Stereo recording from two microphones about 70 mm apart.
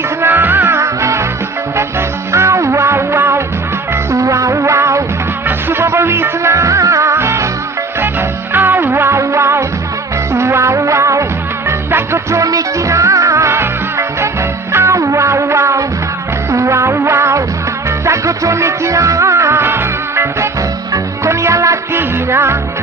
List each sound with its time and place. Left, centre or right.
0.2 s music: right
0.8 s music: right
4.1 s music: right
5.5 s music of bollywood: right
8.5 s music: right
14.7 s music: right
21.9 s music: right